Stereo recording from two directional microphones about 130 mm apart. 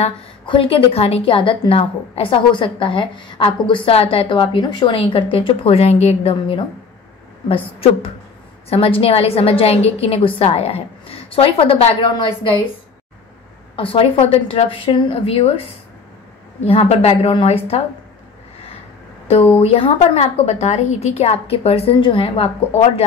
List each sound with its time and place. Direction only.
0.5 s a woman's voice: 45° left (ahead or behind)
13.7 s a woman's voice: 45° left (ahead or behind)
16.6 s a woman's voice: 50° left (ahead or behind)
19.6 s a woman's voice: 50° left (ahead or behind)